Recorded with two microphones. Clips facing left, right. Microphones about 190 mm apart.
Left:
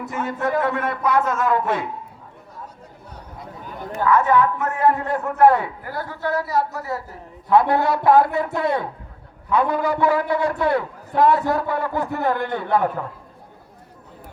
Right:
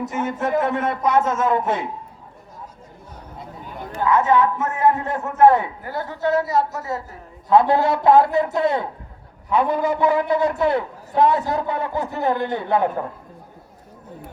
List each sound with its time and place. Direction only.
0.1 s a man's voice: 20° right (ahead or behind)
3.9 s a man's voice: 20° right (ahead or behind)